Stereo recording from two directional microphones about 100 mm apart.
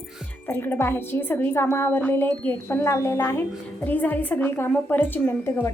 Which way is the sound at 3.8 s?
15° left (ahead or behind).